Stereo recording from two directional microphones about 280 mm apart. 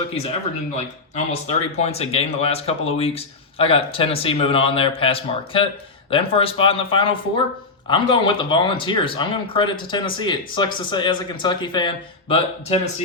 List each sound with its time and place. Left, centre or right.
1.1 s speech: left